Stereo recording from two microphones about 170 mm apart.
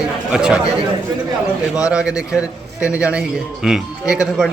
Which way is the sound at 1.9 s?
5° right (ahead or behind).